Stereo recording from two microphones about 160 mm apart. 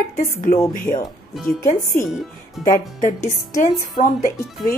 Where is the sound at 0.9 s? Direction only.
25° left (ahead or behind).